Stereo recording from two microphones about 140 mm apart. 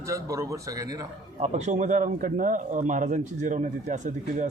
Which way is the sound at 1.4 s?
50° right (ahead or behind).